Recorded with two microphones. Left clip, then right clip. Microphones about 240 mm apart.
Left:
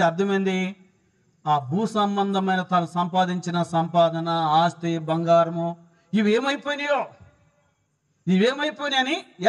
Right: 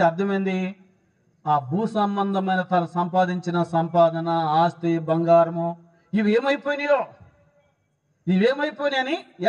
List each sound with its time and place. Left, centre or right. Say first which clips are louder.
0.0 s a man's voice: even; left
8.3 s a man's voice: right 1 dB; left